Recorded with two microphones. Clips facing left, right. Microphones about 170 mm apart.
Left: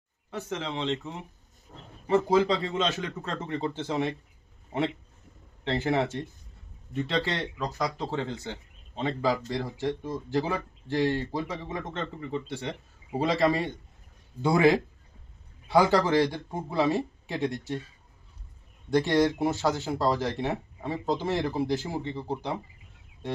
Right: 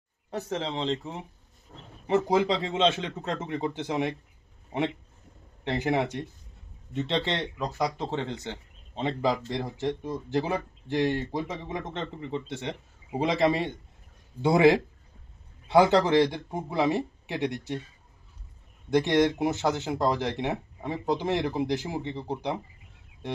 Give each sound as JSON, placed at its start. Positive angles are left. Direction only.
{"t": 0.3, "sound": "speech", "side_deg": -35}
{"t": 2.0, "sound": "a man's voice", "side_deg": -20}
{"t": 5.6, "sound": "a man's voice", "side_deg": -15}
{"t": 18.9, "sound": "speech", "side_deg": -20}